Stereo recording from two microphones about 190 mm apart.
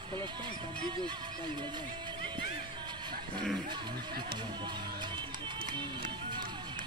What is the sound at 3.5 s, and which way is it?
Speech, 25° right (ahead or behind).